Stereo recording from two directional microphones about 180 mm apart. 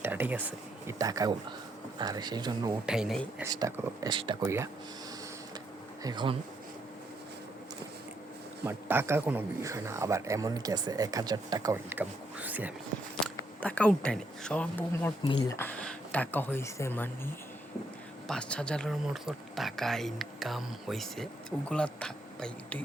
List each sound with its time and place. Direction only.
0.0 s speech: 10° right (ahead or behind)
2.8 s speech: 5° right (ahead or behind)
3.4 s speech: 20° right (ahead or behind)
4.4 s a man's voice: 15° right (ahead or behind)
6.0 s speech: 25° right (ahead or behind)
8.6 s a man's voice: 10° right (ahead or behind)
13.1 s speech: 5° left (ahead or behind)